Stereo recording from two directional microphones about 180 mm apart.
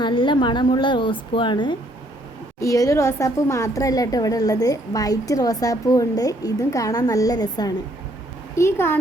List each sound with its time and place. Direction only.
0.0 s a woman's voice: 25° left (ahead or behind)